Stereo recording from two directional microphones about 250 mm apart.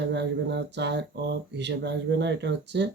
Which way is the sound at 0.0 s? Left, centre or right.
Right.